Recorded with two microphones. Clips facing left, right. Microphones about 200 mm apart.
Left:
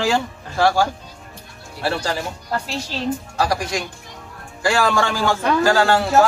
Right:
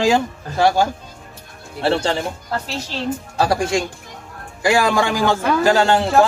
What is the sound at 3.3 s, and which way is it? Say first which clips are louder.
Speech: right 6 dB; 25° right (ahead or behind).